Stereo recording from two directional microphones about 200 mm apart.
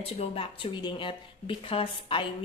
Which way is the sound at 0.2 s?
30° left (ahead or behind).